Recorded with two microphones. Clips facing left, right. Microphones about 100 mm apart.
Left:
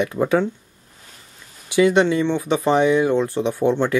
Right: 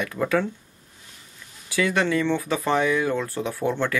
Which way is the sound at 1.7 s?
20° left (ahead or behind).